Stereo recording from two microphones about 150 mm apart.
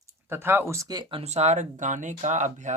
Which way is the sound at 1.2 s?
45° right (ahead or behind).